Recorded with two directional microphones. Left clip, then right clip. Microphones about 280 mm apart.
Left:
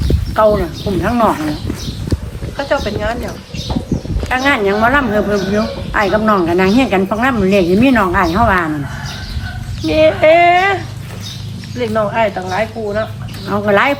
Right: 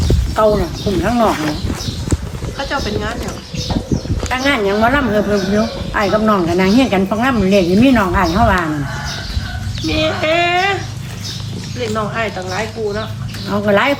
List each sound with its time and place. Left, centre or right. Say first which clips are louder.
0.3 s speech: left 2 dB; centre
2.6 s speech: left 3 dB; left
4.3 s speech: left 2 dB; centre
9.8 s speech: left 7 dB; left
11.8 s speech: left 5 dB; left
13.5 s speech: left 1 dB; centre